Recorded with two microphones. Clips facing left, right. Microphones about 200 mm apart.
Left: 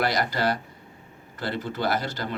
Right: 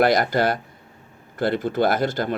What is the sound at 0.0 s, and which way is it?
Speech, 50° right (ahead or behind).